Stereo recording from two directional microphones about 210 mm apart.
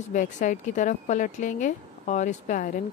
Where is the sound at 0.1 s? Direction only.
40° left (ahead or behind).